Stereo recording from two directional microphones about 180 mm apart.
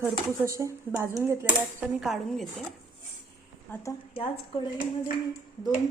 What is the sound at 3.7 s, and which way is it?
Speech, 15° left (ahead or behind).